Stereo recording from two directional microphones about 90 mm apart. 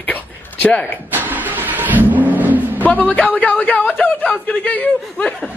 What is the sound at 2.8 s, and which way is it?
A man's voice, 15° left (ahead or behind).